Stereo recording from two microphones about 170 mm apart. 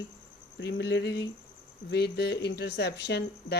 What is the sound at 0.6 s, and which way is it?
Speech, 80° left.